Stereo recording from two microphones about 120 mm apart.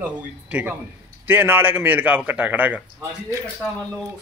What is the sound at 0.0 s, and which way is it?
Speech, 10° right (ahead or behind).